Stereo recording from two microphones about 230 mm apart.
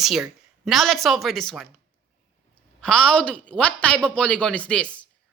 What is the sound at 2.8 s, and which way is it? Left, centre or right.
Speech, centre.